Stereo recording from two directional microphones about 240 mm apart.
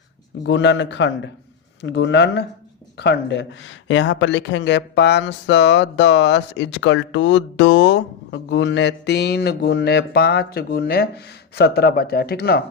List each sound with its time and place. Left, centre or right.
0.4 s speech: left